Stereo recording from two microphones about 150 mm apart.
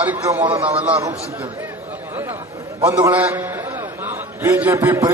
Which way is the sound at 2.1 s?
15° right (ahead or behind).